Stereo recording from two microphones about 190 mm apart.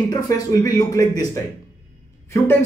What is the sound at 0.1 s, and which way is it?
Speech, 20° left (ahead or behind).